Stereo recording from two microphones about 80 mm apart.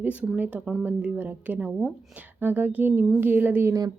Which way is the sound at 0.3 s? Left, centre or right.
Right.